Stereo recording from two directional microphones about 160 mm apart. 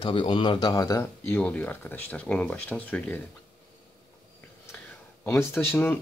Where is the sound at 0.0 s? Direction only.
30° left (ahead or behind); by 3.2 s 10° left (ahead or behind).